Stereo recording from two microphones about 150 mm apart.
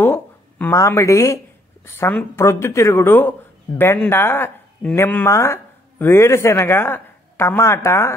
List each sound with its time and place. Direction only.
0.0 s a man's voice: 15° left (ahead or behind)